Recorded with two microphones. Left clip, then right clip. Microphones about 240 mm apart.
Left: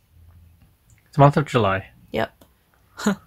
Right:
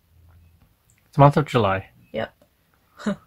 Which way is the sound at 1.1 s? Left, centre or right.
Centre.